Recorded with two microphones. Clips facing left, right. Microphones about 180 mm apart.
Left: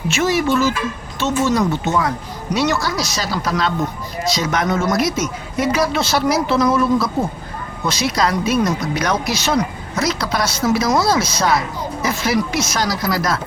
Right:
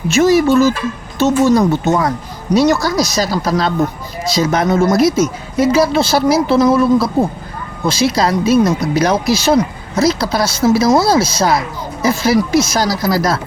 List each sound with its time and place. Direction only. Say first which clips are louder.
0.1 s speech: right 7 dB; 40° right (ahead or behind)